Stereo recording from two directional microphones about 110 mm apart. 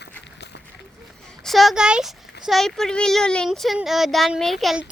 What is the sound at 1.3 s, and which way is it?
A child's voice, 5° left (ahead or behind).